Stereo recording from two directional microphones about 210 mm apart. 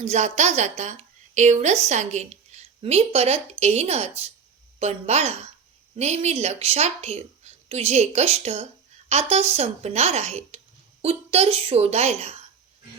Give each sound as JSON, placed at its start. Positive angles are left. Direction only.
{"t": 0.0, "sound": "a woman's voice", "side_deg": -35}